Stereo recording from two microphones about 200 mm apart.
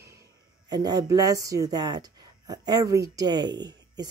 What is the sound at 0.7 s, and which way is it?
A woman's voice, 20° right (ahead or behind).